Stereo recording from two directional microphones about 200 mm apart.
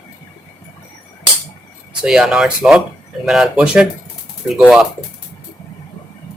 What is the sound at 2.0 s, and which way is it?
Speech, centre (ahead or behind).